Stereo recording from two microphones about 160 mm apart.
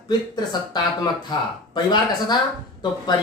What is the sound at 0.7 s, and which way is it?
Speech, 25° left (ahead or behind).